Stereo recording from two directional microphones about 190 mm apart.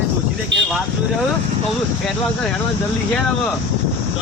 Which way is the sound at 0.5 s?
75° right (ahead or behind).